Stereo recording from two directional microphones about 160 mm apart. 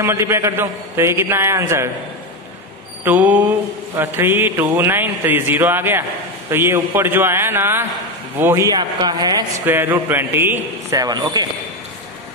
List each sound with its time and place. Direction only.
0.0 s mantra: 15° right (ahead or behind)
3.0 s mantra: 10° right (ahead or behind)
8.6 s a man's voice: 25° right (ahead or behind)
9.7 s mantra: 10° right (ahead or behind)